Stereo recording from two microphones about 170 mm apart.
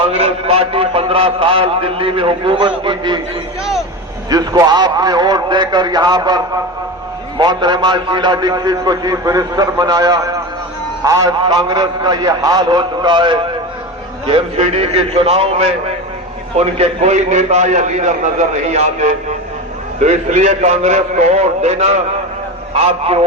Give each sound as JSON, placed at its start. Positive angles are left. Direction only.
{"t": 0.0, "sound": "a man's voice", "side_deg": -40}
{"t": 4.3, "sound": "a man's voice", "side_deg": -20}